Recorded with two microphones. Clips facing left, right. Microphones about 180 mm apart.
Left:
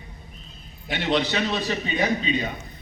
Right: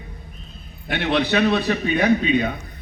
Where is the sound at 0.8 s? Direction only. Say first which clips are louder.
Right 3 dB; 60° right (ahead or behind).